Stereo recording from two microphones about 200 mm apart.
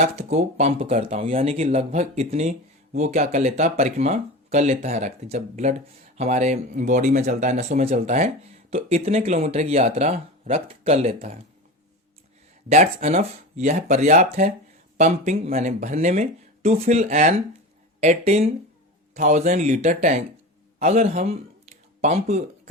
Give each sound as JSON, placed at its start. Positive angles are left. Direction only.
{"t": 0.0, "sound": "speech", "side_deg": -35}
{"t": 12.6, "sound": "speech", "side_deg": -35}
{"t": 20.7, "sound": "a sound", "side_deg": -35}